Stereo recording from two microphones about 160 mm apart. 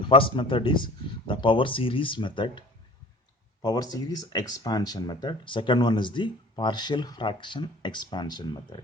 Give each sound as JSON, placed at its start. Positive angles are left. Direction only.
{"t": 0.0, "sound": "speech", "side_deg": 30}